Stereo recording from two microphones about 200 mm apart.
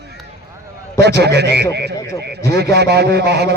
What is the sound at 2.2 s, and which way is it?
A man's voice, 55° right (ahead or behind).